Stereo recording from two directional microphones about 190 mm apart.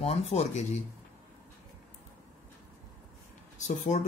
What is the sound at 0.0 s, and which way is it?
Speech, 35° left (ahead or behind).